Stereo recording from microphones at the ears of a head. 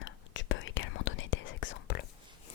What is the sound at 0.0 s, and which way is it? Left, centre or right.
Whispering, left.